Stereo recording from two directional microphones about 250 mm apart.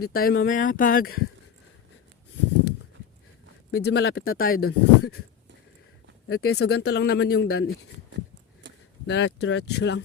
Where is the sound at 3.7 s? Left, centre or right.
Left.